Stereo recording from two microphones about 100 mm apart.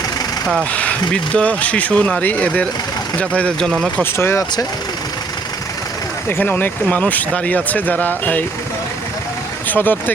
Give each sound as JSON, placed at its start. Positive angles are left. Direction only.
{"t": 0.7, "sound": "a sound", "side_deg": 15}
{"t": 1.1, "sound": "speech", "side_deg": 10}
{"t": 3.9, "sound": "speech", "side_deg": 25}
{"t": 6.2, "sound": "speech", "side_deg": 20}
{"t": 9.6, "sound": "speech", "side_deg": 20}